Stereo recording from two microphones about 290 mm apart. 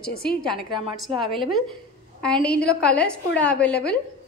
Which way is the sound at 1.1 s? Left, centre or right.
Centre.